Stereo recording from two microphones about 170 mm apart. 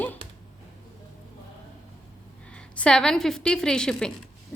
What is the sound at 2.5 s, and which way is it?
A woman's voice, 5° left (ahead or behind).